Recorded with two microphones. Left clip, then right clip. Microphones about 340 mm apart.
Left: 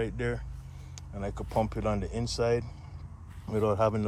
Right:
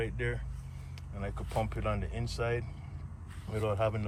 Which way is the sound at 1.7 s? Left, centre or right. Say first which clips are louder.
Left 4 dB; centre.